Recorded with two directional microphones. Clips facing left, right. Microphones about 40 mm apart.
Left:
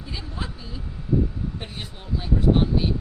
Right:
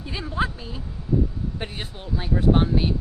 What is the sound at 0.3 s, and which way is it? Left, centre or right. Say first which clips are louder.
Speech: right 8 dB; right.